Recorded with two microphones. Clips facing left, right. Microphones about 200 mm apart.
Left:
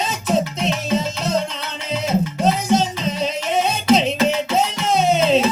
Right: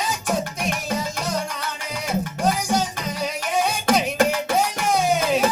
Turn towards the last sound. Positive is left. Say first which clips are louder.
# left 4 dB
turn(degrees=25)  # may be behind; listen again after turning